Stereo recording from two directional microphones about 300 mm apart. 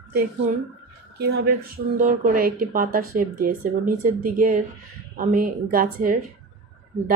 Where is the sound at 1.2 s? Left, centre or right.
Right.